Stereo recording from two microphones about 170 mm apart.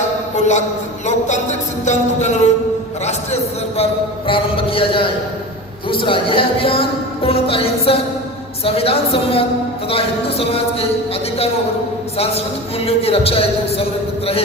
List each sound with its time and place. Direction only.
0.3 s a man's voice: 45° left (ahead or behind)
12.1 s speech: 35° left (ahead or behind)